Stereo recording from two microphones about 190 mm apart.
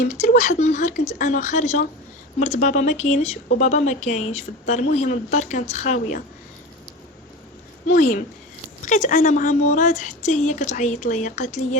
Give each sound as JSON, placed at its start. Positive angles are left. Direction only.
{"t": 0.0, "sound": "a woman's voice", "side_deg": 40}
{"t": 7.9, "sound": "a woman's voice", "side_deg": 45}